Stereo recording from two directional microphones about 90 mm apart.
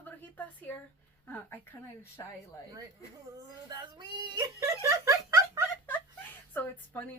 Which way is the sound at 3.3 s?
45° right (ahead or behind).